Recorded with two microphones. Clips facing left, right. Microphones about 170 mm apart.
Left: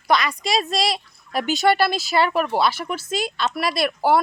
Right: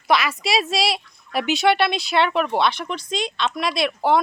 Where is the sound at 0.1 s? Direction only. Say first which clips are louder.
Even; 5° right (ahead or behind).